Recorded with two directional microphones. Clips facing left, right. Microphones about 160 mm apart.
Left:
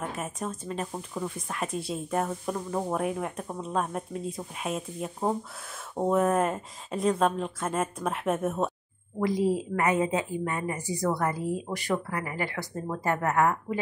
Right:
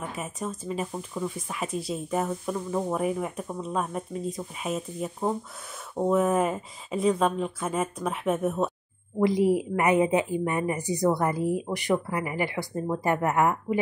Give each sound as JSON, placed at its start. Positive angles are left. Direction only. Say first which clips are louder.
{"t": 0.1, "sound": "speech", "louder": "even", "side_deg": 0}
{"t": 9.2, "sound": "speech", "louder": "right 4 dB", "side_deg": -15}